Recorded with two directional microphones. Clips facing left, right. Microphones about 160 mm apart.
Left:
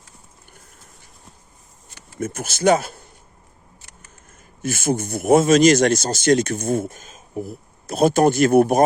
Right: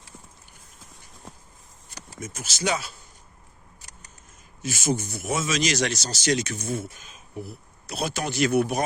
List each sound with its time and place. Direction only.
2.1 s speech: 55° left (ahead or behind)
4.6 s speech: 55° left (ahead or behind)